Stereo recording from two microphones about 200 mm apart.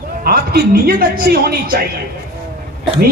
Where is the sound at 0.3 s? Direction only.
50° right (ahead or behind).